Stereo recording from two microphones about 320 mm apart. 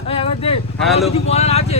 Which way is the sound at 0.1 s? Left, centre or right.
Centre.